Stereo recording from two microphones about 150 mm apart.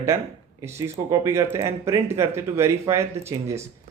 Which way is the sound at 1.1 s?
20° right (ahead or behind).